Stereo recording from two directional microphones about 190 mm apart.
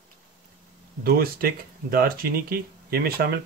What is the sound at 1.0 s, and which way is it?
Speech, 50° right (ahead or behind).